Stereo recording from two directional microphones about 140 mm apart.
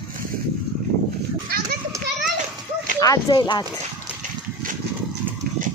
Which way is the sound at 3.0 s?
25° left (ahead or behind).